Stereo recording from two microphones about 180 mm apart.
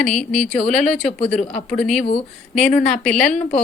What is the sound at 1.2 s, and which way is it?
Speech, 40° left (ahead or behind).